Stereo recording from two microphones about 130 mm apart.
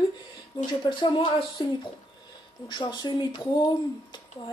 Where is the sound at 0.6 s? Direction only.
35° left (ahead or behind).